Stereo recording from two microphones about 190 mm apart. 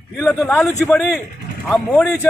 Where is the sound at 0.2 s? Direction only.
5° left (ahead or behind).